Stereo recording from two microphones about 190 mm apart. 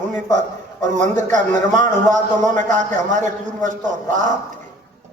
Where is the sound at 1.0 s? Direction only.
40° right (ahead or behind).